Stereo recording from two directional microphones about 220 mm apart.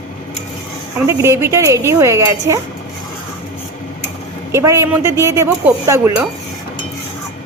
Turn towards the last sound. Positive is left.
turn(degrees=-10)  # may be behind; listen again after turning